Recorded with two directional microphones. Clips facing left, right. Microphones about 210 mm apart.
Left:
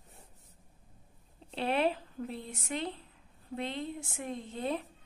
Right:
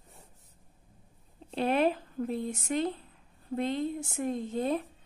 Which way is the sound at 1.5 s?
45° right (ahead or behind).